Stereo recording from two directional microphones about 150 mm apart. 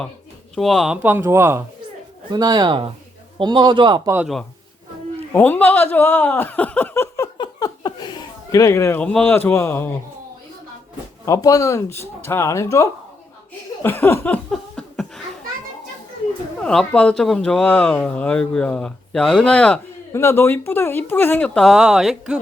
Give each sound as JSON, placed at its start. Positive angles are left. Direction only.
{"t": 0.5, "sound": "speech", "side_deg": 0}
{"t": 1.0, "sound": "speech", "side_deg": -15}
{"t": 2.3, "sound": "a man's voice", "side_deg": -25}
{"t": 5.3, "sound": "speech", "side_deg": 10}
{"t": 7.3, "sound": "speech", "side_deg": 30}
{"t": 11.3, "sound": "speech", "side_deg": 25}
{"t": 13.8, "sound": "speech", "side_deg": 15}
{"t": 14.5, "sound": "laughter", "side_deg": 0}
{"t": 16.6, "sound": "speech", "side_deg": 5}